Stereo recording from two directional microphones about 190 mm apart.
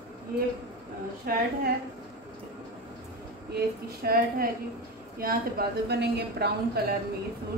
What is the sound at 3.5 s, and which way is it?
A woman's voice, 55° right (ahead or behind).